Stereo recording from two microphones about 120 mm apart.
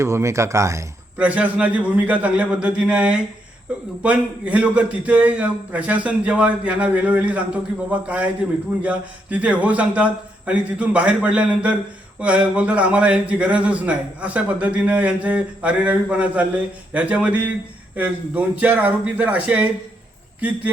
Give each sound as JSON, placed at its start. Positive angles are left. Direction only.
{"t": 0.0, "sound": "speech", "side_deg": -25}
{"t": 1.1, "sound": "a man's voice", "side_deg": -10}